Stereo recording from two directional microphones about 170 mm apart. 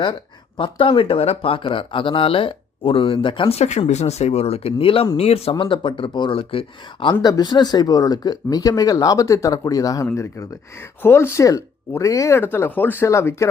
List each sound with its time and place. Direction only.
0.0 s speech: 25° left (ahead or behind)